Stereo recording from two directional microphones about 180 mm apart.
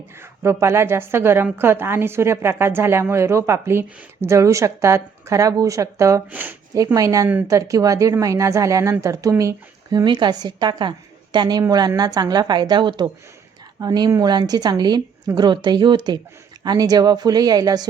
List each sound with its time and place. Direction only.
0.2 s a woman's voice: 15° right (ahead or behind)